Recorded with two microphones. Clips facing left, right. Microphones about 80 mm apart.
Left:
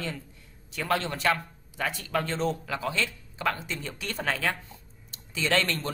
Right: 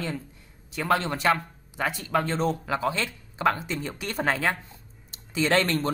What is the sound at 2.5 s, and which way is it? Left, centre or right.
Speech, right.